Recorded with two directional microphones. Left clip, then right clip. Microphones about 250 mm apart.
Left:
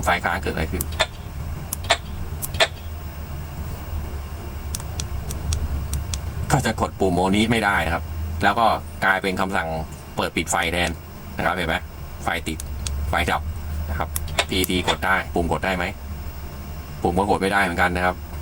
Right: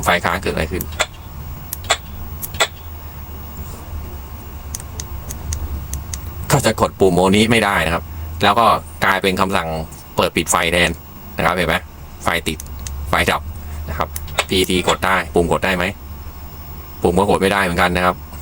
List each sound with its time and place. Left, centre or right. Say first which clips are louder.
0.2 s speech: right 5 dB; right
6.5 s speech: right 6 dB; right
17.0 s speech: right 6 dB; right